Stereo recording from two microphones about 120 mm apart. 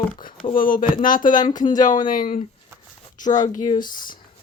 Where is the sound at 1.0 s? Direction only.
90° left.